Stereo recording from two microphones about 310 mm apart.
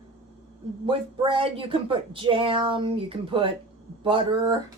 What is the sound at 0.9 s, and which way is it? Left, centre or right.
A woman's voice, centre.